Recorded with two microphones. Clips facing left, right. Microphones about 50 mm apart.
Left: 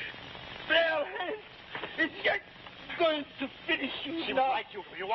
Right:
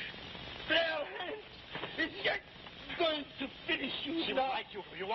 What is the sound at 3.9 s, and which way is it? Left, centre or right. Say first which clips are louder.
Speech: left 1 dB; left.